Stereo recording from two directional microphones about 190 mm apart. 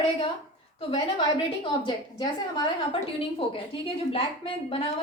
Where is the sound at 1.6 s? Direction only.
25° left (ahead or behind).